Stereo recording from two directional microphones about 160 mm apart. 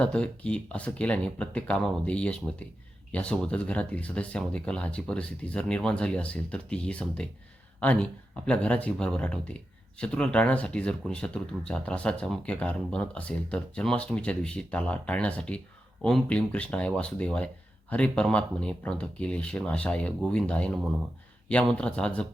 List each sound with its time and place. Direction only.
0.0 s speech: 5° left (ahead or behind)